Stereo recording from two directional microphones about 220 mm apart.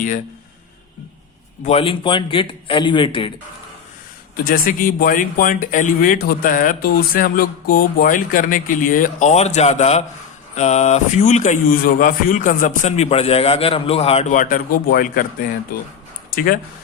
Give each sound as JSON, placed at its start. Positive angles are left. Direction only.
{"t": 1.6, "sound": "a man's voice", "side_deg": 25}
{"t": 4.4, "sound": "speech", "side_deg": 40}